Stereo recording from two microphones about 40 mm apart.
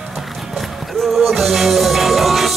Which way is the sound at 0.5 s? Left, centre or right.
Centre.